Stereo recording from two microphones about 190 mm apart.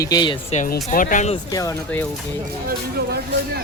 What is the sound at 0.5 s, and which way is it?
Speech, 40° left (ahead or behind).